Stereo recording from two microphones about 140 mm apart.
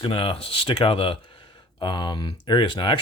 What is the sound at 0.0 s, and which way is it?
Speech, 40° left (ahead or behind).